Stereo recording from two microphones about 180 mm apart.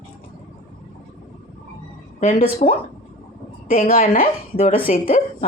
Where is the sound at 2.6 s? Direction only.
40° left (ahead or behind).